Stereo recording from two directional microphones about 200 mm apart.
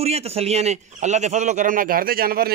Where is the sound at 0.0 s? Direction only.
30° right (ahead or behind).